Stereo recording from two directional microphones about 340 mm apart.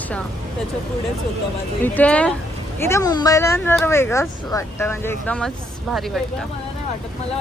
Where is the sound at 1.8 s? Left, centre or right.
Centre.